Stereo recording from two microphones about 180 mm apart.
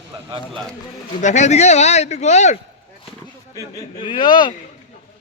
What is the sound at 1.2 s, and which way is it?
A man's voice, 40° left (ahead or behind).